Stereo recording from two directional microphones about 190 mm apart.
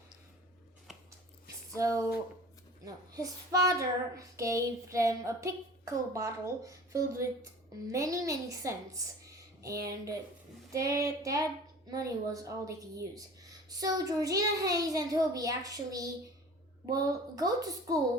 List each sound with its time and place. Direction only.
1.7 s child singing: 15° right (ahead or behind)
13.7 s a child's voice: 20° right (ahead or behind)